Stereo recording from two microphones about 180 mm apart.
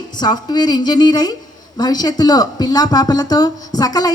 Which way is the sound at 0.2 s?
25° left (ahead or behind).